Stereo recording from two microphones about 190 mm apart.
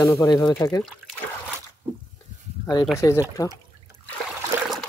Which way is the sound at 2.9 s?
15° left (ahead or behind).